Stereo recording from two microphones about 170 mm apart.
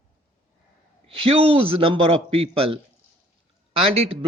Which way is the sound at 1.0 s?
30° right (ahead or behind).